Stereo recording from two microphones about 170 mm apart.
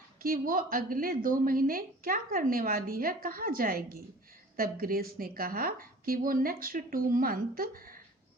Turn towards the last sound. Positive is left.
turn(degrees=-55)  # may be behind; listen again after turning